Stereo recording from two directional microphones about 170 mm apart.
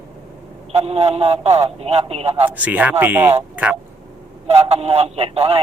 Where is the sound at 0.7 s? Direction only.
35° right (ahead or behind).